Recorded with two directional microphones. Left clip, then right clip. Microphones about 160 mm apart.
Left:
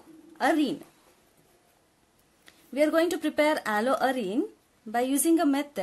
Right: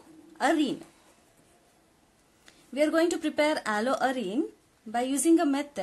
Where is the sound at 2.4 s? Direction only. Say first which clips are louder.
Left 1 dB; 20° left (ahead or behind).